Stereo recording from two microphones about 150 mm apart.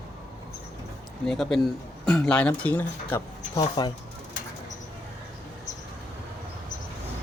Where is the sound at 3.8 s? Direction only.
30° left (ahead or behind).